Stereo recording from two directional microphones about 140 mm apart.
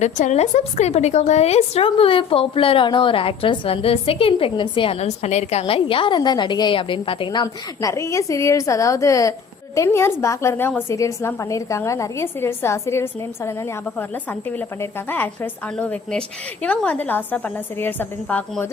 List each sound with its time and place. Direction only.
0.0 s a woman's voice: 55° left (ahead or behind); by 18.7 s 10° left (ahead or behind)